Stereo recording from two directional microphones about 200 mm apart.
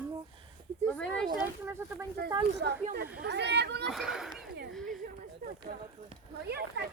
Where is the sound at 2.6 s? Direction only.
60° right (ahead or behind).